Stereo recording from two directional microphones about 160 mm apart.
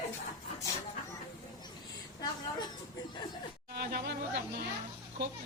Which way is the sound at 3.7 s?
75° right (ahead or behind).